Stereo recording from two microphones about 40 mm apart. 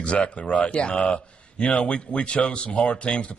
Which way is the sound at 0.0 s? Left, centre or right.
Left.